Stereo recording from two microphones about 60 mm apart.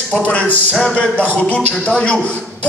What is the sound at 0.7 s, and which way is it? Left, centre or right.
Speech, centre.